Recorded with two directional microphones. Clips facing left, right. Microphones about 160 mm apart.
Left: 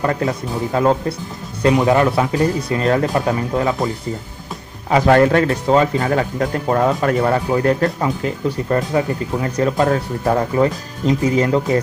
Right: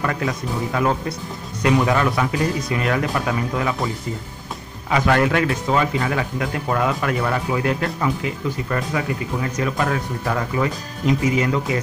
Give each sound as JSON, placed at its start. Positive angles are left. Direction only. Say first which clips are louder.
{"t": 0.0, "sound": "speech", "louder": "left 4 dB", "side_deg": 30}
{"t": 4.9, "sound": "speech", "louder": "left 6 dB", "side_deg": 35}